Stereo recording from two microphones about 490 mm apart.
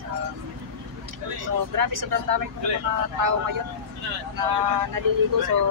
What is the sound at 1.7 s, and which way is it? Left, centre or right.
Speech, right.